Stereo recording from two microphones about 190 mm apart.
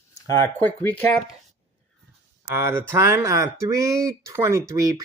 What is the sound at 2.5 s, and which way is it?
Speech, 15° right (ahead or behind).